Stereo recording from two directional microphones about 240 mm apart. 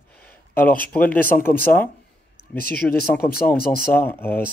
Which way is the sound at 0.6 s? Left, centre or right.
Centre.